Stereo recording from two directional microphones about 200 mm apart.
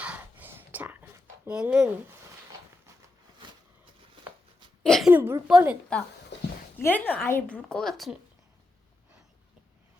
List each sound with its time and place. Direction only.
0.0 s a sound: 10° right (ahead or behind)
4.8 s a woman's voice: centre (ahead or behind)
6.7 s a woman's voice: 10° left (ahead or behind)